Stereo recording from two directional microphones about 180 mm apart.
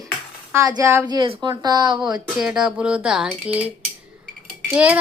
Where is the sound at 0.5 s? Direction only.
15° right (ahead or behind).